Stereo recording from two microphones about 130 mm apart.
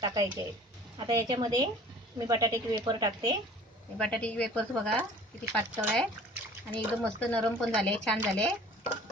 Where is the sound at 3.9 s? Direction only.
10° left (ahead or behind).